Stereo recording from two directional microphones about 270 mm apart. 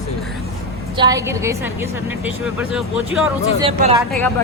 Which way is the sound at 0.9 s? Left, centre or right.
Centre.